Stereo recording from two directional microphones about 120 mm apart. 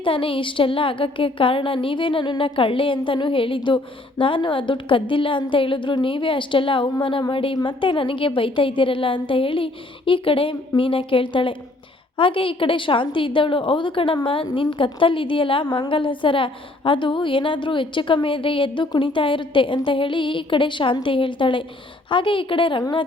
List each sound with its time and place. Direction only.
0.0 s a woman's voice: 45° left (ahead or behind)